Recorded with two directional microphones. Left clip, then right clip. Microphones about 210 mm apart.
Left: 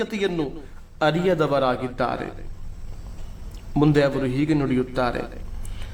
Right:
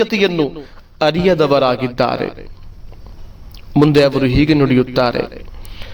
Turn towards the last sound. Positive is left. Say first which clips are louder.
# right 9 dB
turn(degrees=-40)  # may be behind; listen again after turning